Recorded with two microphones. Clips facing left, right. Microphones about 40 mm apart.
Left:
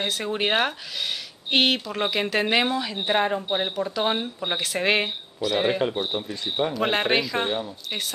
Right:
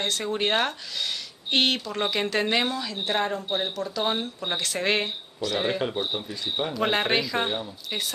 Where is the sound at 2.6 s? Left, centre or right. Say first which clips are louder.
Left 3 dB; left.